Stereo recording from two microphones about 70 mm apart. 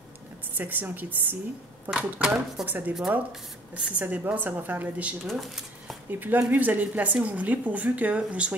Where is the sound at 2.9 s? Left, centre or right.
Centre.